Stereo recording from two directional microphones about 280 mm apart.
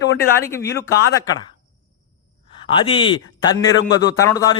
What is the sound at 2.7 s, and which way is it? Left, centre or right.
Speech, centre.